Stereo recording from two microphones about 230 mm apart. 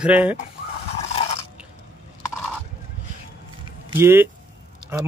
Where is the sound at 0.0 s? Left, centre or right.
Centre.